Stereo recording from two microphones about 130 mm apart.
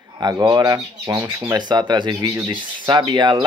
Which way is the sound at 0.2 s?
35° right (ahead or behind).